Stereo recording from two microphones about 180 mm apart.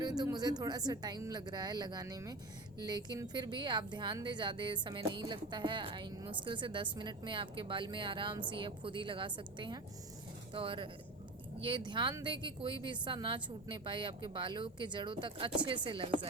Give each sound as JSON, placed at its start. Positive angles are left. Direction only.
{"t": 0.0, "sound": "a woman's voice", "side_deg": -20}